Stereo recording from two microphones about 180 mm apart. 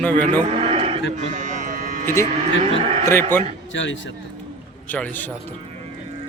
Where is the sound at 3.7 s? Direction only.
90° left.